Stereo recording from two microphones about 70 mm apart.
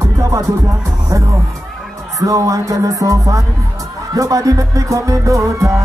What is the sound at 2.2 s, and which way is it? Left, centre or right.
Speech, right.